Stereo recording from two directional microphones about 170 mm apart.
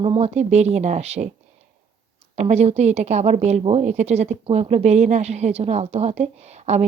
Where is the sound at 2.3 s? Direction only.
40° right (ahead or behind).